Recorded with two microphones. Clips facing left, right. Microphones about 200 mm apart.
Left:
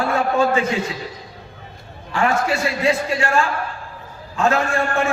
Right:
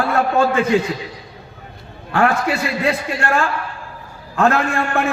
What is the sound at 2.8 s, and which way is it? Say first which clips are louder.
A man's voice: left 1 dB; 60° right (ahead or behind).